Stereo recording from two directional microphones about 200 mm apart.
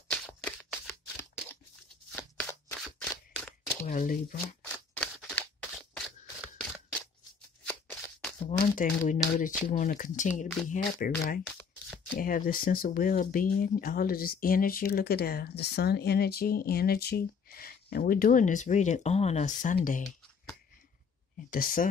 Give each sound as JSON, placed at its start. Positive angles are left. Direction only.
{"t": 0.1, "sound": "a sound", "side_deg": 5}
{"t": 2.1, "sound": "a sound", "side_deg": 5}
{"t": 3.8, "sound": "speech", "side_deg": 40}
{"t": 4.6, "sound": "scissors", "side_deg": 5}
{"t": 6.4, "sound": "single-lens reflex camera", "side_deg": -5}
{"t": 8.5, "sound": "speech", "side_deg": 40}
{"t": 21.5, "sound": "speech", "side_deg": 45}